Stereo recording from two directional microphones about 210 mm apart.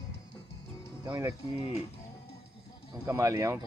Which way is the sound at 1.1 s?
20° right (ahead or behind).